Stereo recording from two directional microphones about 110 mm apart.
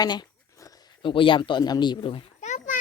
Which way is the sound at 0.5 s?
30° left (ahead or behind).